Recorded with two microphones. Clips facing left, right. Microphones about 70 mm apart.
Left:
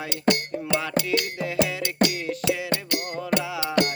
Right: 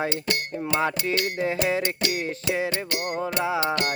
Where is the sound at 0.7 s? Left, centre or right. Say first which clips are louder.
Even; right.